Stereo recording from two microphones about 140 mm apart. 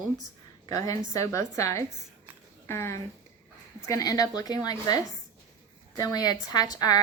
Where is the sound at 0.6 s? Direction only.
25° left (ahead or behind).